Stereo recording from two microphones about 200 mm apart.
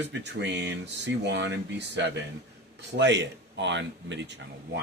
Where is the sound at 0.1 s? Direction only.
60° right (ahead or behind).